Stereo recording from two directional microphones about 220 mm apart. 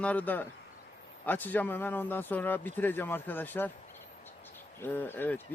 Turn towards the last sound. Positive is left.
turn(degrees=10)  # may be behind; listen again after turning